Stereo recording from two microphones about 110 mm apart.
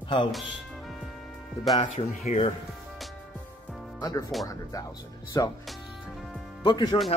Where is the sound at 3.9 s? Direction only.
35° left (ahead or behind).